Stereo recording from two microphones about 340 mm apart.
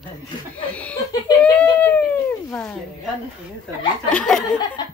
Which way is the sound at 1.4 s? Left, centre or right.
Centre.